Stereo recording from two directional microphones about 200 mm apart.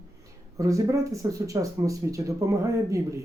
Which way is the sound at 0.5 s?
15° right (ahead or behind).